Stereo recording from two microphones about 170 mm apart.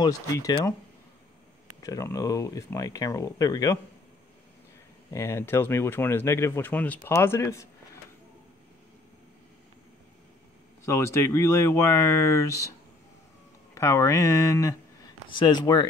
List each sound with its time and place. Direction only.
0.0 s speech: 20° left (ahead or behind)
1.8 s speech: 20° left (ahead or behind)
5.1 s speech: 15° left (ahead or behind)
10.9 s speech: 15° left (ahead or behind)
13.7 s speech: 15° left (ahead or behind)